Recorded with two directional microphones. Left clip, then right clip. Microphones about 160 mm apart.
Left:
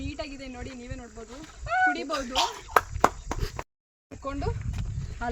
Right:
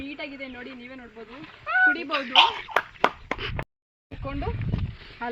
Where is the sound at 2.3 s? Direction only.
30° right (ahead or behind).